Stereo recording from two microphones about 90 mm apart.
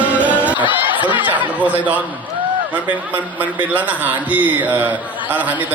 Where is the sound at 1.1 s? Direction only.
20° right (ahead or behind).